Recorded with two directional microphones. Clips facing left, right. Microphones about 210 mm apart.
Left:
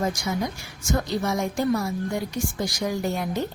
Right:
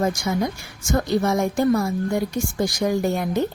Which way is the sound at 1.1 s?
55° right (ahead or behind).